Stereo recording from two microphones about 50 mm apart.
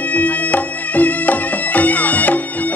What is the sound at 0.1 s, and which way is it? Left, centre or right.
Music, left.